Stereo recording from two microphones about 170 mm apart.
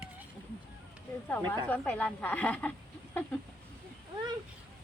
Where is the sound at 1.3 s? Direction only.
10° left (ahead or behind).